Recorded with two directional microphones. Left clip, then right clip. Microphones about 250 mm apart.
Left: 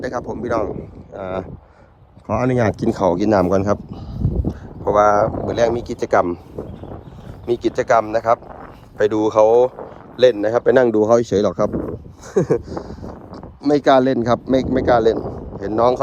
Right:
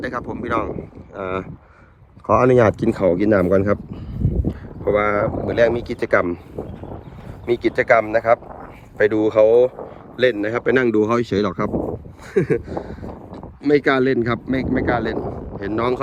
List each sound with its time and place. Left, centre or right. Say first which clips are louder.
0.0 s speech: left 2 dB; centre
2.8 s speech: even; centre
7.4 s speech: right 1 dB; centre
8.0 s speech: right 1 dB; centre
9.0 s speech: even; centre
11.7 s speech: right 1 dB; right
12.6 s speech: right 1 dB; centre
13.7 s speech: left 3 dB; centre